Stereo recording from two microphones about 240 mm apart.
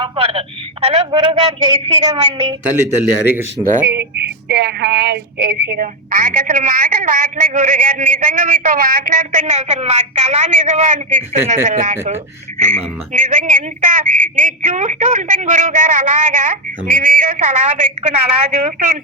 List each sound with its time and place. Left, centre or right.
0.0 s speech: right
2.0 s a woman's voice: centre
3.6 s speech: right